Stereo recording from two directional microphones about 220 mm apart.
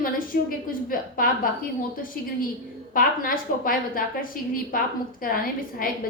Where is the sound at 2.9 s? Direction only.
40° left (ahead or behind).